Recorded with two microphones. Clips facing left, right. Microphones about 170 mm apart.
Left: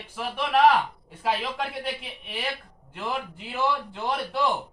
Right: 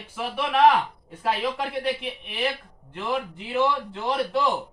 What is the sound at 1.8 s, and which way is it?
A man's voice, 5° left (ahead or behind).